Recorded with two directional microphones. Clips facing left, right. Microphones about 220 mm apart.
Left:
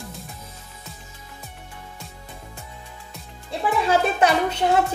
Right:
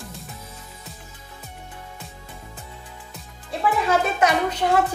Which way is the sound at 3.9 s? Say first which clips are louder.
Left 2 dB; 30° left (ahead or behind).